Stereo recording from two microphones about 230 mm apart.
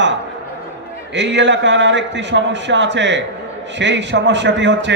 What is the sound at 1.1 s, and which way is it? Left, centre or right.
A man's voice, right.